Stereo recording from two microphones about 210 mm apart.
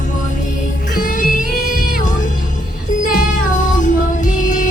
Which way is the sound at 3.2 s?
40° left (ahead or behind).